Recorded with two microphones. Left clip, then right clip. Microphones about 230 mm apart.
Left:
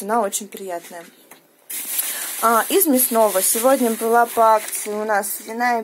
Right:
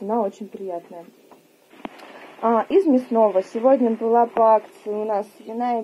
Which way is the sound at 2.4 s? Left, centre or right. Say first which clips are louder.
Left 1 dB; left.